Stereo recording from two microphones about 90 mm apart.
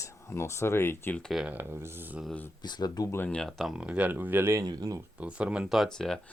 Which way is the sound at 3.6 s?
10° right (ahead or behind).